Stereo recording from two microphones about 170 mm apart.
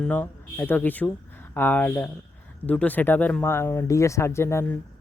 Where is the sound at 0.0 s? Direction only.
10° left (ahead or behind).